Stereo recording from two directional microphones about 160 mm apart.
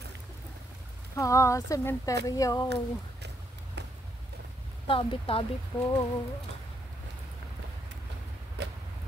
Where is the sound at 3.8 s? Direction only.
90° right.